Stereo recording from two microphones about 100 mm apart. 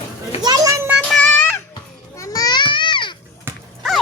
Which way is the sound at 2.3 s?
45° left (ahead or behind).